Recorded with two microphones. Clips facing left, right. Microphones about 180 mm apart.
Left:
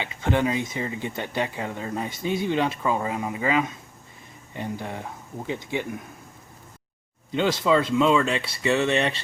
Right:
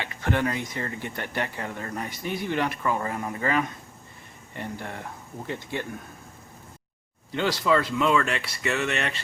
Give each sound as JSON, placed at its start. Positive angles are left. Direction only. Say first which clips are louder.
{"t": 0.0, "sound": "speech", "louder": "left 3 dB", "side_deg": 15}
{"t": 7.3, "sound": "speech", "louder": "left 2 dB", "side_deg": 20}